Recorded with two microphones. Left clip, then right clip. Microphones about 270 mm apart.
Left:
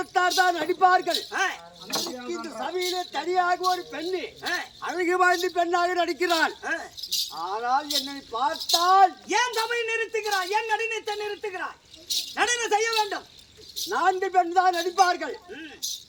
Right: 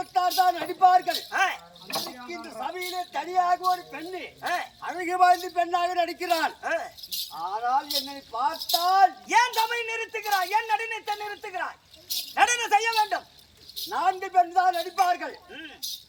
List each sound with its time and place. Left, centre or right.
0.0 s speech: centre
1.3 s speech: centre
2.0 s speech: centre
3.1 s speech: centre
4.4 s speech: centre
5.3 s a man's voice: centre
5.5 s speech: centre
6.6 s speech: centre
7.0 s speech: centre
10.5 s speech: centre
13.7 s speech: centre